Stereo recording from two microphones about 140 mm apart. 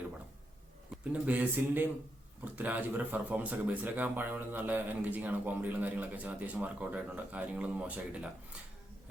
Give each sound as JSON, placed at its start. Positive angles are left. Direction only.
{"t": 1.1, "sound": "speech", "side_deg": -10}